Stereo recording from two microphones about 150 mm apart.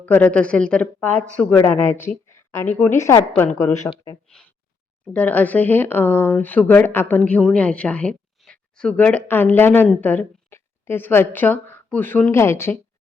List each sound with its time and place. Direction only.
0.0 s speech: 10° left (ahead or behind)
2.3 s a sound: 20° left (ahead or behind)
2.7 s speech: 15° left (ahead or behind)
4.3 s a woman's voice: 5° left (ahead or behind)